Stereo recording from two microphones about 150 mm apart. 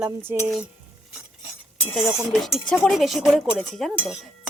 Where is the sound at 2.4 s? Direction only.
Centre (ahead or behind).